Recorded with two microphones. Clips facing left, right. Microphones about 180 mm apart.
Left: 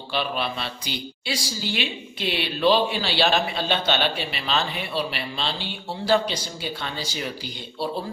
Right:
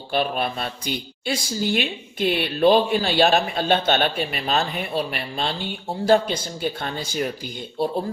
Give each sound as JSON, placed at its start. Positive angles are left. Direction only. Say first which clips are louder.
{"t": 0.1, "sound": "speech", "louder": "right 4 dB", "side_deg": -50}